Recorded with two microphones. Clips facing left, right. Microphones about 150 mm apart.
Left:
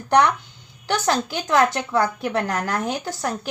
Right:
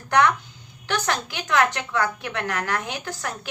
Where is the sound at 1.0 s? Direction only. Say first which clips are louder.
Left 5 dB; 30° left (ahead or behind).